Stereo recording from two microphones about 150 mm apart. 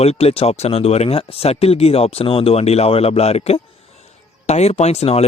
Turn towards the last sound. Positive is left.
turn(degrees=45)  # may be behind; listen again after turning